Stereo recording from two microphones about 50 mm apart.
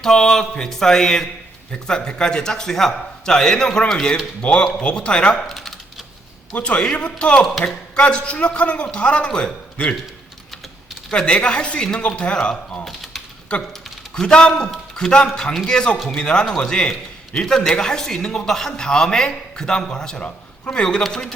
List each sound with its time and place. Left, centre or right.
0.0 s a man's voice: centre
5.5 s typing: centre
6.5 s a man's voice: left
11.1 s a man's voice: centre
14.1 s a man's voice: centre